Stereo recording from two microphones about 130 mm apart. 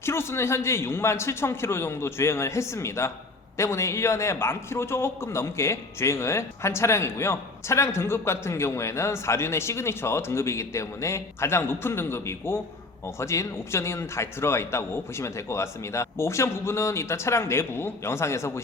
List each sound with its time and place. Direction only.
0.0 s a man's voice: 20° left (ahead or behind)